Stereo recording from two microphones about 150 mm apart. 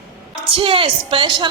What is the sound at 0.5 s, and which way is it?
Speech, 35° right (ahead or behind).